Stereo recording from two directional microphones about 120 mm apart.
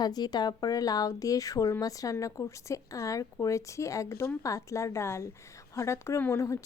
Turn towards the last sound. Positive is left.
turn(degrees=25)  # may be behind; listen again after turning